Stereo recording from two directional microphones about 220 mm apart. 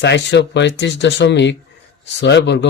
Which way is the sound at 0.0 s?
55° left (ahead or behind).